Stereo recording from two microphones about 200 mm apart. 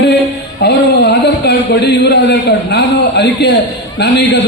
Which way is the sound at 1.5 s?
55° left (ahead or behind).